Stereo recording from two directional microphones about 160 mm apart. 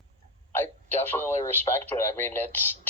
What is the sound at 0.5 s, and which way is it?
Speech, 15° left (ahead or behind).